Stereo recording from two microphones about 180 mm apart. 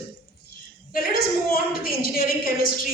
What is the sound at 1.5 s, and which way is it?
Speech, 55° left (ahead or behind).